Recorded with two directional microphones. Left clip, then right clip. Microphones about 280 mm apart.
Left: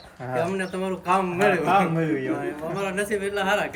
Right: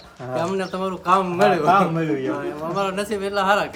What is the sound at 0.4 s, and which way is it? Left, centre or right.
Speech, centre.